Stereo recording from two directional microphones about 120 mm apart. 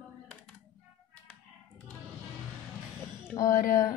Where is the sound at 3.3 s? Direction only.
30° left (ahead or behind).